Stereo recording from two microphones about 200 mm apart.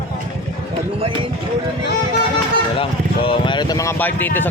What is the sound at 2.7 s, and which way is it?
Speech, 25° left (ahead or behind).